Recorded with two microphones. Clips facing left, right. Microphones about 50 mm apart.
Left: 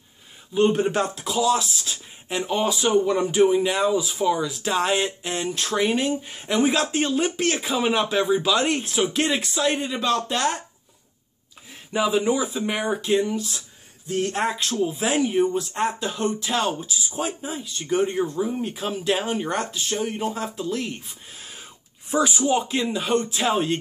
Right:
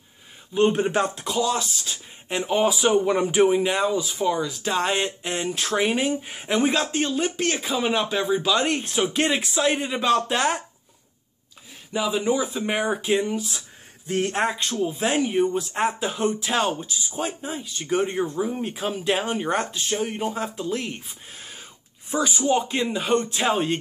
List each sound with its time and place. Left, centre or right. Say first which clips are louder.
0.6 s speech: even; centre
1.2 s speech: left 2 dB; centre; by 3.6 s right
3.6 s speech: left 1 dB; centre
3.9 s speech: left 1 dB; centre
6.6 s speech: left 2 dB; centre
6.9 s speech: left 1 dB; centre
11.9 s a man's voice: left 2 dB; centre
12.7 s speech: even; centre
13.2 s speech: left 1 dB; right
14.4 s speech: even; centre
17.6 s speech: left 1 dB; centre
21.4 s wheeze: even; centre
22.1 s a man's voice: left 3 dB; centre
22.7 s speech: even; centre